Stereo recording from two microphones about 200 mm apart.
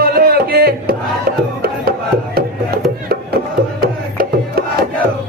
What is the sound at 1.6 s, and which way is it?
Music, 50° right (ahead or behind).